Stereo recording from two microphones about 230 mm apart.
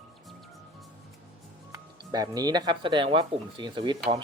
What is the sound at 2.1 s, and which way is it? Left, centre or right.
Speech, centre.